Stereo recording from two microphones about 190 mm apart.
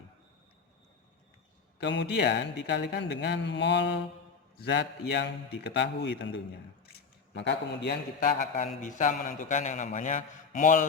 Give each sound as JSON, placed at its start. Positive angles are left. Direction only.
{"t": 1.8, "sound": "a man's voice", "side_deg": 65}
{"t": 6.9, "sound": "a sound", "side_deg": 60}
{"t": 8.2, "sound": "a man's voice", "side_deg": 45}